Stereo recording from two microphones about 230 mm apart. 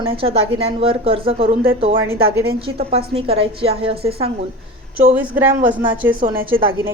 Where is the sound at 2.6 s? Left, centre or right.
Right.